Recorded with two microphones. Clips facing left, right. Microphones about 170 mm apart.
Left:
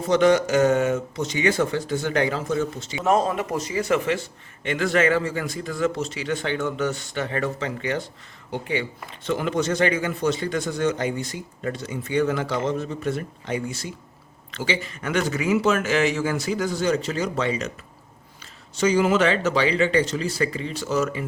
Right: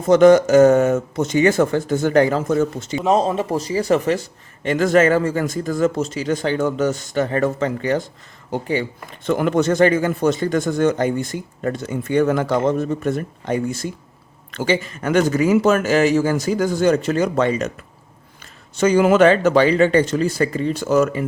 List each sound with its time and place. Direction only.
0.1 s speech: 45° right (ahead or behind)
3.0 s a man's voice: 20° right (ahead or behind); by 17.7 s 50° right (ahead or behind)
18.8 s speech: 55° right (ahead or behind)